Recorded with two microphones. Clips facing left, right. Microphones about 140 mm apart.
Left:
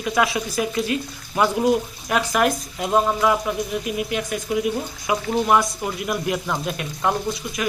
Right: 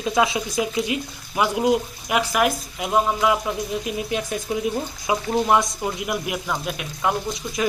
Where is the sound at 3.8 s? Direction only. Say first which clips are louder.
Left 1 dB; 30° right (ahead or behind).